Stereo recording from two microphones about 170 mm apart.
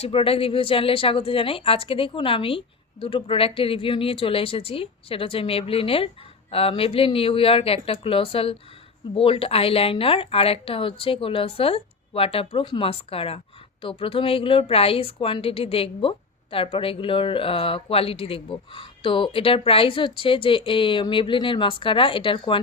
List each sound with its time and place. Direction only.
0.0 s a woman's voice: 35° left (ahead or behind)